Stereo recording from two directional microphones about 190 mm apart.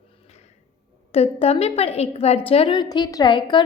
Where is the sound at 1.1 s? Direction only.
30° left (ahead or behind).